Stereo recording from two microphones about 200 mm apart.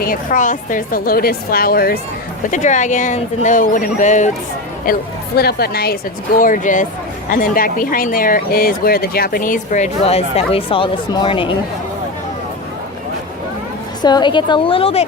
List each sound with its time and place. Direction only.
0.0 s speech: 45° left (ahead or behind)
2.5 s speech: 40° left (ahead or behind)
14.0 s a woman's voice: 20° left (ahead or behind)